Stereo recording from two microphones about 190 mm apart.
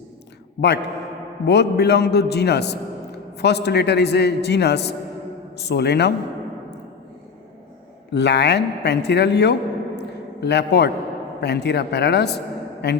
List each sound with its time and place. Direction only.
1.5 s a man's voice: 60° left (ahead or behind)
8.1 s a man's voice: 65° left (ahead or behind)